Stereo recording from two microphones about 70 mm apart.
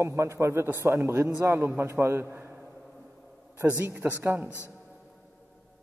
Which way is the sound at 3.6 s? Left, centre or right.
Right.